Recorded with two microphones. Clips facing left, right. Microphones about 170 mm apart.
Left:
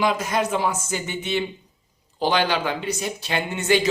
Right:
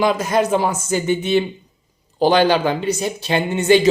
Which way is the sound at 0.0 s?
40° right (ahead or behind).